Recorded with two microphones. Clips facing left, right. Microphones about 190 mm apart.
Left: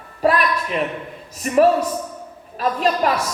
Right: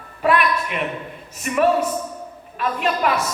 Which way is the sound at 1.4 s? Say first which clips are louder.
Left 3 dB; 35° left (ahead or behind).